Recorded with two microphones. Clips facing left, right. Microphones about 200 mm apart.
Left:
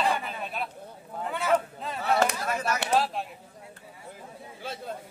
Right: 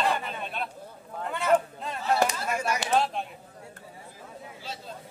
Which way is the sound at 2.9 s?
Centre (ahead or behind).